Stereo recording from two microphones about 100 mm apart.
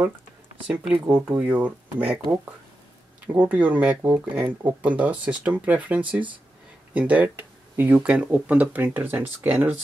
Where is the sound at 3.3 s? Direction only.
15° right (ahead or behind).